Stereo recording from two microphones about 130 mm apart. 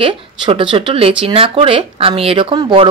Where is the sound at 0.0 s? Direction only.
45° right (ahead or behind).